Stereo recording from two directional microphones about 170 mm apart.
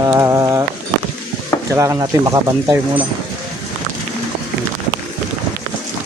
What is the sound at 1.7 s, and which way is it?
Speech, 15° right (ahead or behind).